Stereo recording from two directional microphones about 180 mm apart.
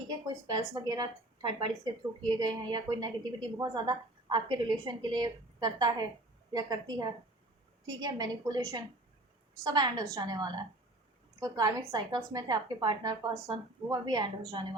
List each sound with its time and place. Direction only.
0.1 s a woman's voice: 20° right (ahead or behind)